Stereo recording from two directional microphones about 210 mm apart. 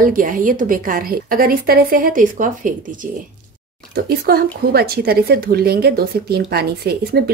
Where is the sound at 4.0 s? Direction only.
45° right (ahead or behind).